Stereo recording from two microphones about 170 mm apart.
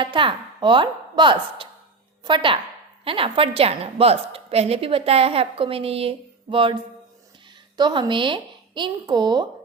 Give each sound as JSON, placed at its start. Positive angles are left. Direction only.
{"t": 0.0, "sound": "a woman's voice", "side_deg": -30}
{"t": 7.8, "sound": "speech", "side_deg": -25}